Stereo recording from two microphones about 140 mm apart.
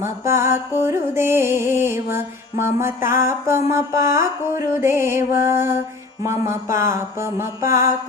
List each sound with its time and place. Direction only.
0.0 s music: 20° right (ahead or behind)
6.2 s mantra: 20° right (ahead or behind)